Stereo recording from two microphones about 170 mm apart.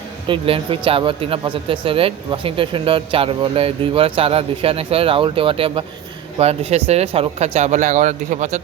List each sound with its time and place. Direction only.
0.3 s speech: 30° right (ahead or behind)